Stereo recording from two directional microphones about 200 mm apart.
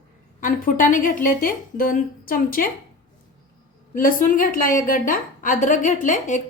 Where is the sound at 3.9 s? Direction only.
45° left (ahead or behind).